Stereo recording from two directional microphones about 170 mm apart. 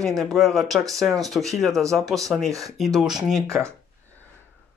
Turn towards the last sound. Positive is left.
turn(degrees=5)  # may be behind; listen again after turning